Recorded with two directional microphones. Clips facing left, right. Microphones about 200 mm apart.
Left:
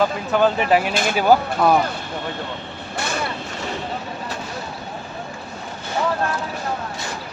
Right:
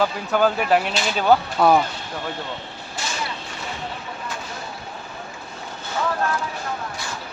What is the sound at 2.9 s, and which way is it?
Vehicle, 60° left (ahead or behind).